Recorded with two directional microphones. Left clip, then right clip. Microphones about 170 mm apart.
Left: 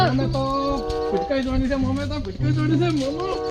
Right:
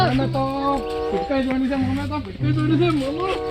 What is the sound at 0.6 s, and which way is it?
Music, centre (ahead or behind).